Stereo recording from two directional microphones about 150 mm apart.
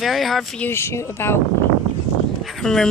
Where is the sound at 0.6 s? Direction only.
15° left (ahead or behind).